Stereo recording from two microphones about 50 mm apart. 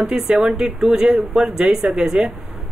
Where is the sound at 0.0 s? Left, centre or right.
Centre.